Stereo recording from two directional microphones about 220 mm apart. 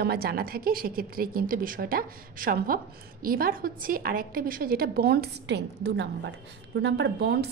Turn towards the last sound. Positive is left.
turn(degrees=-50)  # may be behind; listen again after turning